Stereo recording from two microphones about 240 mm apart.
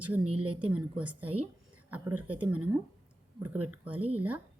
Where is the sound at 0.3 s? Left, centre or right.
Right.